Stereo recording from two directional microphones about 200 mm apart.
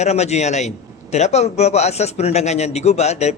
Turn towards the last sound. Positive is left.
turn(degrees=35)  # may be behind; listen again after turning